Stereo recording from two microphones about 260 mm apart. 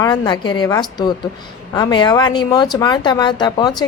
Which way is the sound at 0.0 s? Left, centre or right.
Centre.